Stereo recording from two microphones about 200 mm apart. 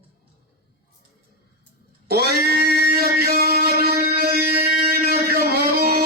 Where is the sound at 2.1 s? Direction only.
55° right (ahead or behind).